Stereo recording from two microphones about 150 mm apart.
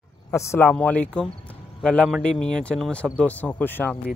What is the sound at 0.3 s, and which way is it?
Speech, 20° left (ahead or behind).